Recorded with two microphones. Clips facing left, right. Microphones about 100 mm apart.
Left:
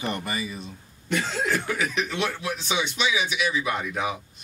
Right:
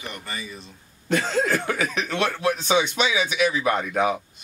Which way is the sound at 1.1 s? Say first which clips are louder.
Right 4 dB; 45° right (ahead or behind).